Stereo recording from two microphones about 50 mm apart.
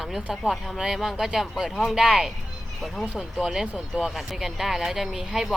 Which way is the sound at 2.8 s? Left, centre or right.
Centre.